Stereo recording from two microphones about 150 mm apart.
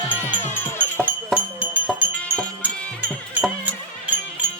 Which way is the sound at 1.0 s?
10° right (ahead or behind).